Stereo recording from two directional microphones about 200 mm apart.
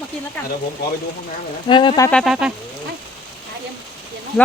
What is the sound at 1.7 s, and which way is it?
Speech, 25° left (ahead or behind).